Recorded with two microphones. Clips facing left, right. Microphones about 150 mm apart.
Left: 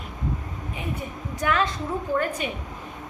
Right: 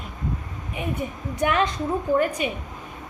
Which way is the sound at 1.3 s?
20° right (ahead or behind).